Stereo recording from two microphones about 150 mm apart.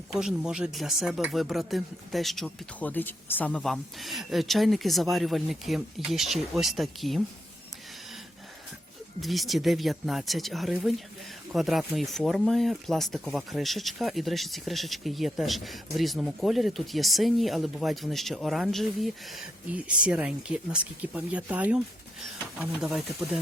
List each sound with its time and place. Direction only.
0.1 s speech: 5° right (ahead or behind)
9.2 s speech: centre (ahead or behind)